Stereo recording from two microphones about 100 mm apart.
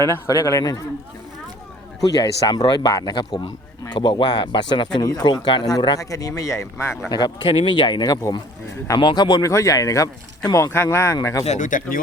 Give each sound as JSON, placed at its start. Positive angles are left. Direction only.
{"t": 0.0, "sound": "speech", "side_deg": 35}
{"t": 2.0, "sound": "speech", "side_deg": 40}
{"t": 7.1, "sound": "speech", "side_deg": 45}
{"t": 7.4, "sound": "speech", "side_deg": 55}
{"t": 9.4, "sound": "speech", "side_deg": 30}